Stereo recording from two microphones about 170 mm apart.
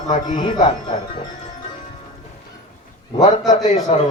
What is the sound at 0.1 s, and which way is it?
Speech, 50° left (ahead or behind).